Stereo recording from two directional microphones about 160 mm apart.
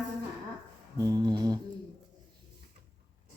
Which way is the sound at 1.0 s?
25° right (ahead or behind).